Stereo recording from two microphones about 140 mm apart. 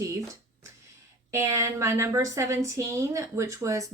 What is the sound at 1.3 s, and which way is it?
A woman's voice, 20° right (ahead or behind).